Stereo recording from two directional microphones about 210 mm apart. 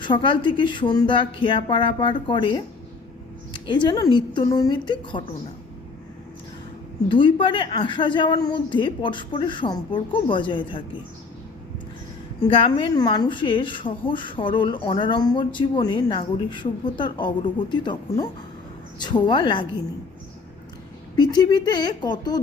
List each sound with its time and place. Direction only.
0.0 s a woman's voice: 25° left (ahead or behind)
7.1 s a woman's voice: 25° left (ahead or behind)
12.4 s a woman's voice: 25° left (ahead or behind)
21.2 s a woman's voice: 20° left (ahead or behind)